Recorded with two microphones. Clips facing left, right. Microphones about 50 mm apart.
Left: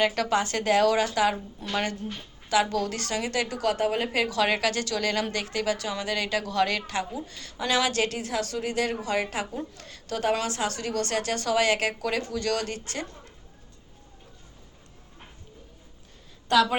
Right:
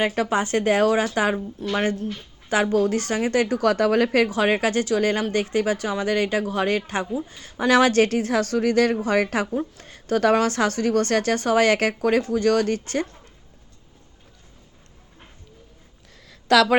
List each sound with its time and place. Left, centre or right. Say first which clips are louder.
0.1 s speech: right 4 dB; right
4.3 s speech: right 4 dB; right
6.7 s speech: right 5 dB; right
7.5 s speech: right 8 dB; right
9.8 s a woman's voice: right 9 dB; right
10.2 s speech: right 7 dB; right
16.3 s a sound: right 5 dB; right